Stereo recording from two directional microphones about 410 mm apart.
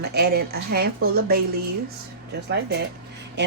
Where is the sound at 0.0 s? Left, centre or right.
Right.